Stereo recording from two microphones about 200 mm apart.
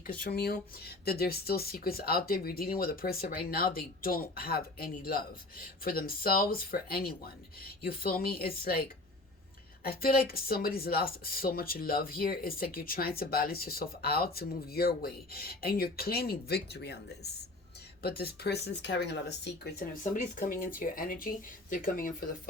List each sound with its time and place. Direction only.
0.0 s speech: 45° left (ahead or behind)